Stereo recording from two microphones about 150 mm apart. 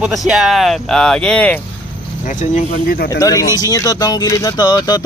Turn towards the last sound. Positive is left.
turn(degrees=25)  # may be behind; listen again after turning